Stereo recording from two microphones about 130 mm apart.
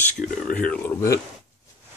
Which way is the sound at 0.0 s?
10° left (ahead or behind).